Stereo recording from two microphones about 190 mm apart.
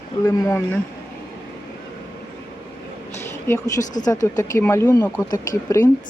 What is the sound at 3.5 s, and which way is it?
Speech, 15° left (ahead or behind).